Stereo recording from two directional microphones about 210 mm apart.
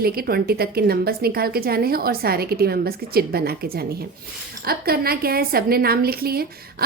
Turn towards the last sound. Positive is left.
turn(degrees=-45)  # may be behind; listen again after turning